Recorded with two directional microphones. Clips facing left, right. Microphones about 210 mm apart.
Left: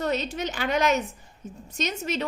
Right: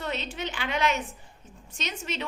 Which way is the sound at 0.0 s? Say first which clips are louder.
Left 6 dB; 40° left (ahead or behind).